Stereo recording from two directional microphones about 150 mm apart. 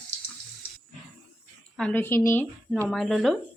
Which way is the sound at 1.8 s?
10° left (ahead or behind).